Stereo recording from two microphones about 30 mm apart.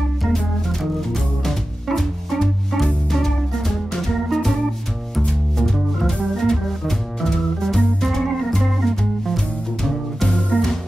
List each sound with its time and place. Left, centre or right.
0.7 s music: centre
5.6 s music: centre
6.3 s organ: centre
8.5 s music: centre
10.5 s music: left